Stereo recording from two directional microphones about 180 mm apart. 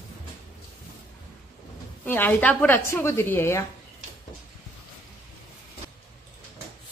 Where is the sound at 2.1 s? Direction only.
10° left (ahead or behind).